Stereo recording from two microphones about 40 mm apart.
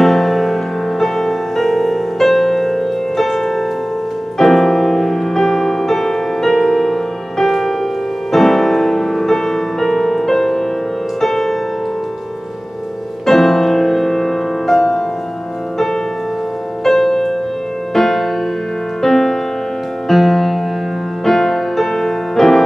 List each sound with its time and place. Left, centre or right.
0.0 s music: centre
13.2 s music: centre
16.8 s music: centre